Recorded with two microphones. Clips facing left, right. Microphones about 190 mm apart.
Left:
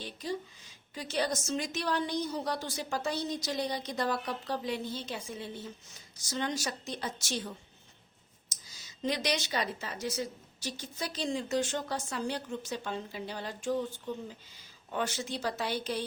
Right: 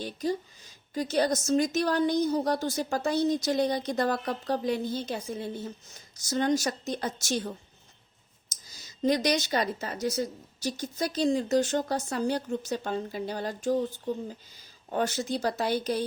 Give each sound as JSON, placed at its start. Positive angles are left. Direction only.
{"t": 0.0, "sound": "a woman's voice", "side_deg": -40}